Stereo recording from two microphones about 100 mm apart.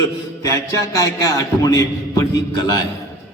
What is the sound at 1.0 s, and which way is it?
Speech, 35° left (ahead or behind).